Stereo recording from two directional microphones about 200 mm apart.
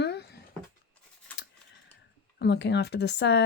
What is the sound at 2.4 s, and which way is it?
Speech, 55° left (ahead or behind).